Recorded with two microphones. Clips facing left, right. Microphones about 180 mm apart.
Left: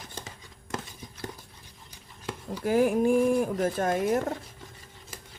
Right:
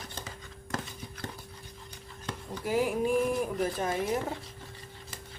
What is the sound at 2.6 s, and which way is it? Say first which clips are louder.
Speech: left 5 dB; 50° left (ahead or behind).